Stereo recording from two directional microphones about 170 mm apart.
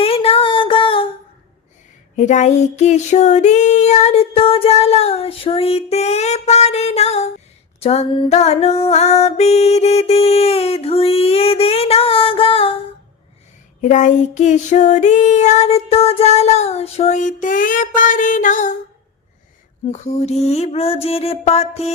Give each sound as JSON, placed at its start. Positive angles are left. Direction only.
{"t": 0.0, "sound": "a sound", "side_deg": 35}
{"t": 2.1, "sound": "female singing", "side_deg": 45}
{"t": 13.8, "sound": "child singing", "side_deg": 45}
{"t": 19.9, "sound": "female singing", "side_deg": 40}